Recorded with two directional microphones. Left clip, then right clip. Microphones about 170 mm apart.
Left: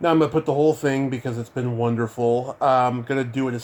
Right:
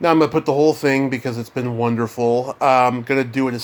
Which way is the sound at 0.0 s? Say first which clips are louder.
Right 4 dB; 15° right (ahead or behind).